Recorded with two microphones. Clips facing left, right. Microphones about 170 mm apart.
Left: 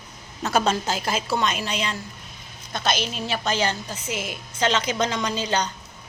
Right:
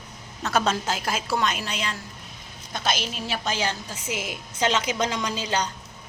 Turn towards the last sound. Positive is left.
turn(degrees=-5)  # may be behind; listen again after turning